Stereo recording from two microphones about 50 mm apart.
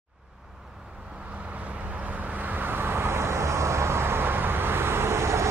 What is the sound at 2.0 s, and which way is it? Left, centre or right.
Vehicle, right.